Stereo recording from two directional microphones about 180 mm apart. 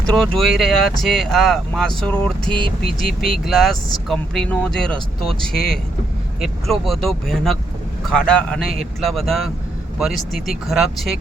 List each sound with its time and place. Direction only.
0.0 s speech: 5° left (ahead or behind)
2.6 s speech: 25° right (ahead or behind)
3.4 s speech: centre (ahead or behind)